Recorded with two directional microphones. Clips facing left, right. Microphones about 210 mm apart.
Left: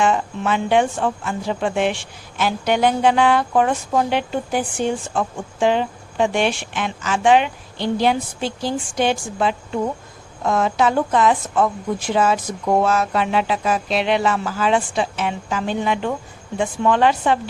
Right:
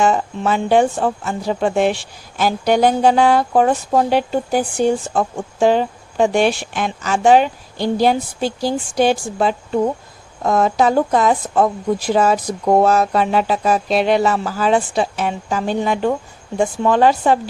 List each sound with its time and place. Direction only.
0.0 s speech: 40° right (ahead or behind)